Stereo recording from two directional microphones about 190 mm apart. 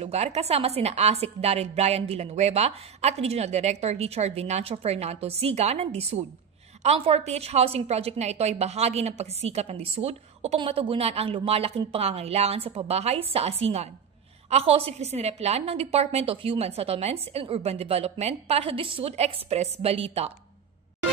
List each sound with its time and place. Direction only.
0.0 s a woman's voice: 35° right (ahead or behind)